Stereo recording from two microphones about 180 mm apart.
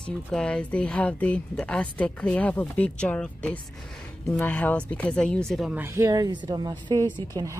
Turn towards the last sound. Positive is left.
turn(degrees=-20)  # may be behind; listen again after turning